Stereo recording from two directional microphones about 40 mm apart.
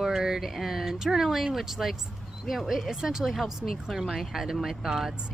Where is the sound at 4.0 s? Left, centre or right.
Centre.